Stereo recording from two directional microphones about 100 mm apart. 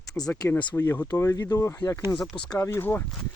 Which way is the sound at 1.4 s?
40° left (ahead or behind).